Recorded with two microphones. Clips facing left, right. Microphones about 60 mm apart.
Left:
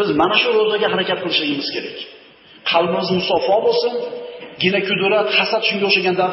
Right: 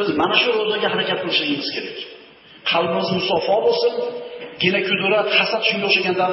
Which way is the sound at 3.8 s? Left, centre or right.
Centre.